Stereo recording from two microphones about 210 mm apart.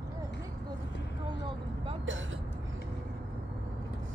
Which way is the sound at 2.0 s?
65° right (ahead or behind).